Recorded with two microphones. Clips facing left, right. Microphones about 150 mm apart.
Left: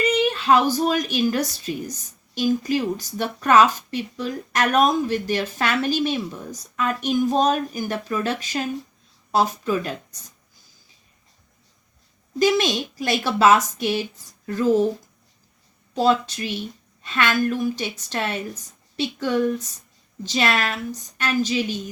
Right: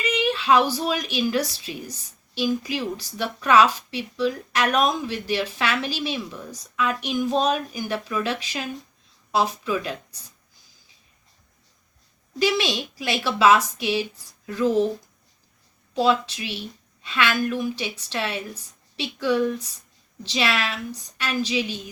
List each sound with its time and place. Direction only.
0.0 s female singing: 45° left (ahead or behind)
0.7 s a woman's voice: 45° left (ahead or behind)
12.4 s a woman's voice: 45° left (ahead or behind)
16.0 s a woman's voice: 45° left (ahead or behind)